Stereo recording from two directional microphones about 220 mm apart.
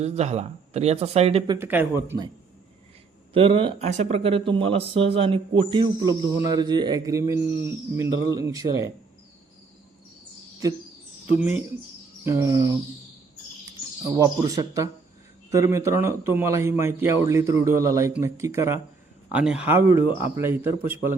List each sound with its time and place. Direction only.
0.0 s speech: 30° right (ahead or behind)
1.5 s a man's voice: 10° right (ahead or behind)
3.3 s a man's voice: 25° right (ahead or behind)
11.3 s a man's voice: 5° right (ahead or behind)
14.0 s a man's voice: 10° right (ahead or behind)